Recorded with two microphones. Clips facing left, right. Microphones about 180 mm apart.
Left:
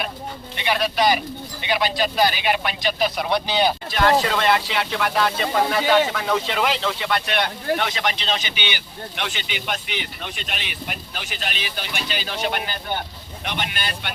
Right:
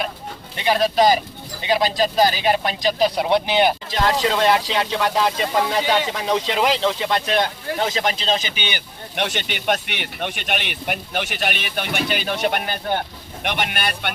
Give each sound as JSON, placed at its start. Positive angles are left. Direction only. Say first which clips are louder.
{"t": 0.5, "sound": "speech", "louder": "right 5 dB", "side_deg": -40}
{"t": 4.3, "sound": "speech", "louder": "right 2 dB", "side_deg": -30}
{"t": 9.1, "sound": "speech", "louder": "right 6 dB", "side_deg": -50}